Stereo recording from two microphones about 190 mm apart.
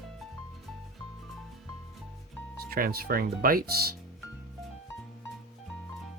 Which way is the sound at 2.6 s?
50° right (ahead or behind).